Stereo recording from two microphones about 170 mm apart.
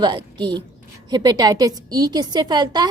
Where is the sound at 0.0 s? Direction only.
25° right (ahead or behind).